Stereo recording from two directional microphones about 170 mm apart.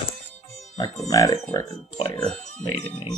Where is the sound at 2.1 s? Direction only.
5° left (ahead or behind).